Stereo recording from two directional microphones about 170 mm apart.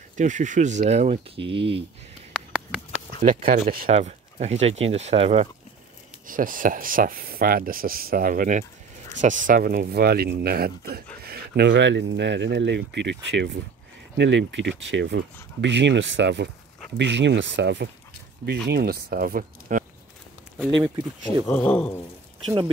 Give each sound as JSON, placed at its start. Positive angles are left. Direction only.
{"t": 0.2, "sound": "speech", "side_deg": -45}
{"t": 2.3, "sound": "a sound", "side_deg": -5}
{"t": 3.3, "sound": "speech", "side_deg": -55}
{"t": 3.9, "sound": "speech", "side_deg": -40}
{"t": 6.2, "sound": "speech", "side_deg": -55}
{"t": 9.8, "sound": "speech", "side_deg": -65}
{"t": 11.2, "sound": "speech", "side_deg": -80}
{"t": 18.7, "sound": "speech", "side_deg": -65}
{"t": 21.5, "sound": "speech", "side_deg": 10}